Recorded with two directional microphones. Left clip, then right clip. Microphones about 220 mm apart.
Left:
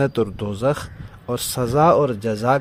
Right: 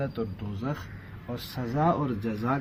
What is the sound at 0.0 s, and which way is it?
Speech, 50° left (ahead or behind).